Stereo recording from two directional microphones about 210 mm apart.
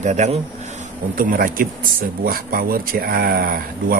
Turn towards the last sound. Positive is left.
turn(degrees=-45)  # may be behind; listen again after turning